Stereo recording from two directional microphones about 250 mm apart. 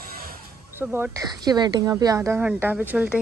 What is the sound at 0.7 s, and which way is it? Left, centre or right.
Speech, centre.